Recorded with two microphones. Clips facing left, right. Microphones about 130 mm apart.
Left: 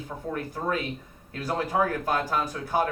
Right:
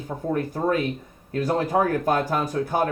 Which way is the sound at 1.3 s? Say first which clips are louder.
Right 5 dB; 50° right (ahead or behind).